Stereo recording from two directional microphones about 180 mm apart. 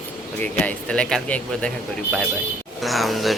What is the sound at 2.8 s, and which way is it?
Speech, centre (ahead or behind).